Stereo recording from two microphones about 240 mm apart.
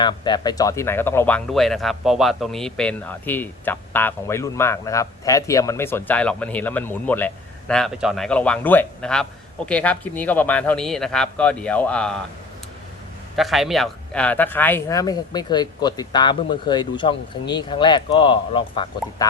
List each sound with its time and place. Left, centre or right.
0.0 s speech: centre
13.3 s speech: centre; by 19.3 s left